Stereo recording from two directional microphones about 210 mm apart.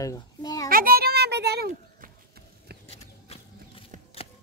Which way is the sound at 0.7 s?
45° right (ahead or behind).